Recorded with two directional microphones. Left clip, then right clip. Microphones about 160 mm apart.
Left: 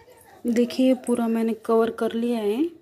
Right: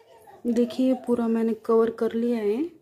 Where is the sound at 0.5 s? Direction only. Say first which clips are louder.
Left 3 dB; centre (ahead or behind).